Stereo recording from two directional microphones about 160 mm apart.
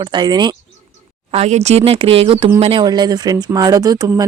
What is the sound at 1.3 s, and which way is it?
Speech, 40° right (ahead or behind).